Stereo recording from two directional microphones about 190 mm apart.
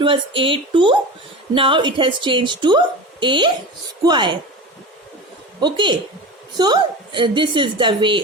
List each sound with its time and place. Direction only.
0.0 s a woman's voice: 30° right (ahead or behind)
5.5 s a woman's voice: 25° right (ahead or behind)